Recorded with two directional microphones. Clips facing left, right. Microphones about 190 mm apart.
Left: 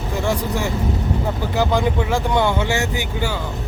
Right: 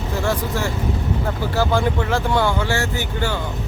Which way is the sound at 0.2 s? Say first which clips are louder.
Left 1 dB; 15° left (ahead or behind).